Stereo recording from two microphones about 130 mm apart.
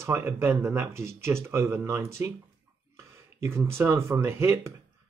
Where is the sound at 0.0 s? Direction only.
20° right (ahead or behind).